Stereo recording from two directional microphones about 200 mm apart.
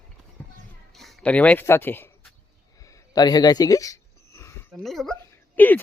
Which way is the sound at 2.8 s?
15° left (ahead or behind).